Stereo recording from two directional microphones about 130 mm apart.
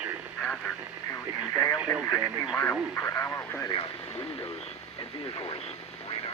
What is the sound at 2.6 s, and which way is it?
Speech, 15° left (ahead or behind).